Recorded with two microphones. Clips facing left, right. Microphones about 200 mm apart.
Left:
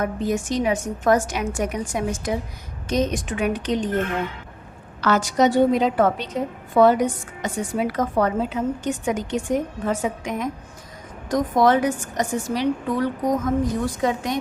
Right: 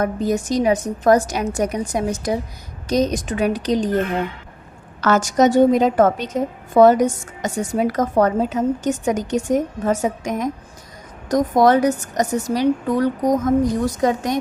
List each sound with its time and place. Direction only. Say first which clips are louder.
0.0 s a woman's voice: right 3 dB; 40° right (ahead or behind)